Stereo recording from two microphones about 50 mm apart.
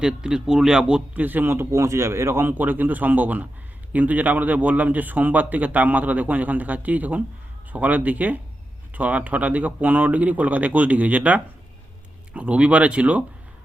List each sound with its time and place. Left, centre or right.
0.0 s a man's voice: centre
1.1 s a man's voice: right
1.5 s a man's voice: right
2.5 s a man's voice: right